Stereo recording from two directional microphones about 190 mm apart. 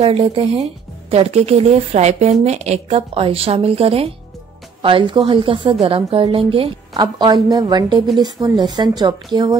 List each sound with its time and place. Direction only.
0.0 s a woman's voice: 30° right (ahead or behind)